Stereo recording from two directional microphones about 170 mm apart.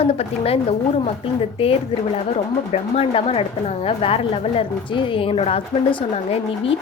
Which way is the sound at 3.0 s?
35° left (ahead or behind).